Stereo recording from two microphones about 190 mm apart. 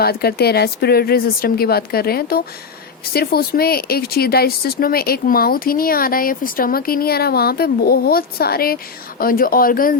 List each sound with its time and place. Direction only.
0.0 s speech: 55° left (ahead or behind)